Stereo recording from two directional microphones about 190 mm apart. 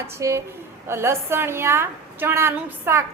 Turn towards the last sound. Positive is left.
turn(degrees=-15)  # may be behind; listen again after turning